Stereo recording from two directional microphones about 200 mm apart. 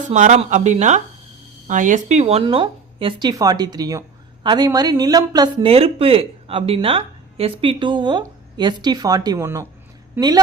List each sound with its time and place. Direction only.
0.1 s speech: 35° right (ahead or behind); by 10.4 s 20° right (ahead or behind)